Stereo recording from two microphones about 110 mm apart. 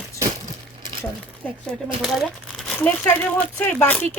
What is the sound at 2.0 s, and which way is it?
Speech, centre (ahead or behind).